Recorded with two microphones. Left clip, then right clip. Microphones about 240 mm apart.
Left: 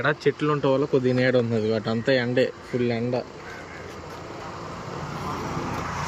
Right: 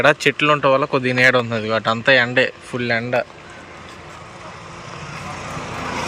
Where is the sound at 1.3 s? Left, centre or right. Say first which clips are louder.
Right 4 dB; centre.